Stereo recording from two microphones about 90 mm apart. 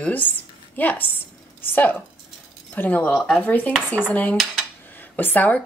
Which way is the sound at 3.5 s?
15° left (ahead or behind).